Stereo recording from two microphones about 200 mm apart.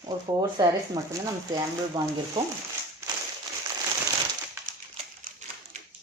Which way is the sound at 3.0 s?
15° right (ahead or behind).